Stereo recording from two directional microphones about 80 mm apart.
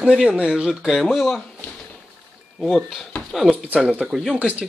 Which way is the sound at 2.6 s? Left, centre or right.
Centre.